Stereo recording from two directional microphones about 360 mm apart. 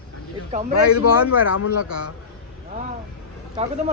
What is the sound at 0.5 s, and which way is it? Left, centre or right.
Speech, centre.